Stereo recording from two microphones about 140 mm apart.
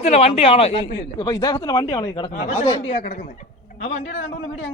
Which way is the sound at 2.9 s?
90° left.